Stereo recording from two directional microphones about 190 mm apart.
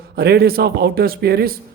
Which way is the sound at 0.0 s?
55° right (ahead or behind).